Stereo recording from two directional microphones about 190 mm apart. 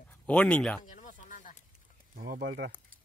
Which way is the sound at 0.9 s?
40° left (ahead or behind).